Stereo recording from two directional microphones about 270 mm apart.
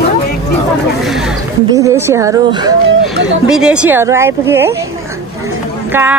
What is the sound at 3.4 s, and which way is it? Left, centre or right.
Speech, centre.